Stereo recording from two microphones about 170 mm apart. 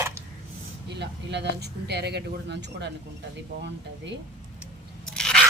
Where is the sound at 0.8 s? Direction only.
90° right.